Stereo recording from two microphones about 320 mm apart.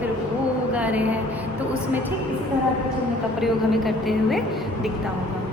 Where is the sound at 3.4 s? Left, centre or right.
Centre.